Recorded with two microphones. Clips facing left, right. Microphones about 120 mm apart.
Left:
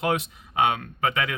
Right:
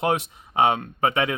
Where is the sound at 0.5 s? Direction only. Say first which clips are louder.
Right 3 dB; 30° right (ahead or behind).